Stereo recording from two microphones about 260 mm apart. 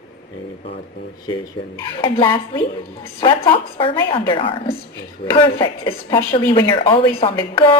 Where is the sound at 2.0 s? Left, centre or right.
Centre.